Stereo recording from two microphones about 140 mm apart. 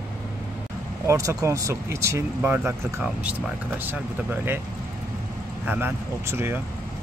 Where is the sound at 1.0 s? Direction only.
20° right (ahead or behind).